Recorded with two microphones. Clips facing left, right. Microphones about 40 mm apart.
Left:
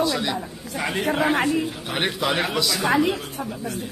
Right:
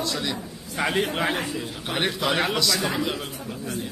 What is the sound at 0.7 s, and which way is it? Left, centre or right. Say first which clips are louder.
A man's voice: left 1 dB; centre.